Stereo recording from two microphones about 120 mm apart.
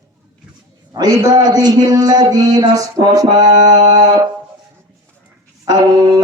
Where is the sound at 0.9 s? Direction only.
30° right (ahead or behind).